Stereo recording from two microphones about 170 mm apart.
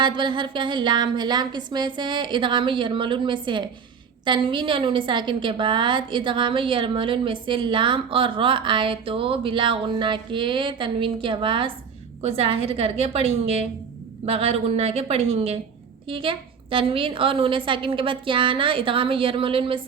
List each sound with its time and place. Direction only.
0.0 s a woman's voice: 25° right (ahead or behind)
14.3 s a woman's voice: 35° right (ahead or behind)